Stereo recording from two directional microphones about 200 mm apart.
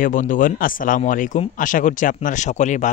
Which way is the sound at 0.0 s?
40° left (ahead or behind).